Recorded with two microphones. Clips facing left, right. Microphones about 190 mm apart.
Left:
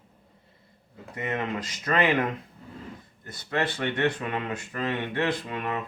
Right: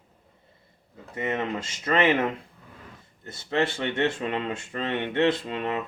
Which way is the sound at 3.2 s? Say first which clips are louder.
Right 3 dB; 25° right (ahead or behind).